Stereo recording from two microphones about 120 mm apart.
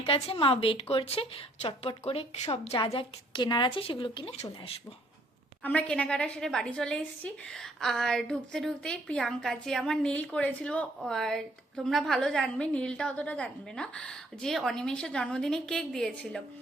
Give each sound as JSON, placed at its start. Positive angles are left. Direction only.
{"t": 0.0, "sound": "a woman's voice", "side_deg": 50}
{"t": 2.9, "sound": "a woman's voice", "side_deg": 40}
{"t": 5.6, "sound": "a woman's voice", "side_deg": 10}